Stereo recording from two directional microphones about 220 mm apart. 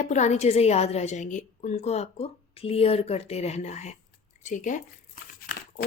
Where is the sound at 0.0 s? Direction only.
35° left (ahead or behind).